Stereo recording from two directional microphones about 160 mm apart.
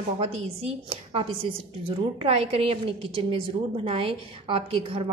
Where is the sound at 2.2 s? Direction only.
40° right (ahead or behind).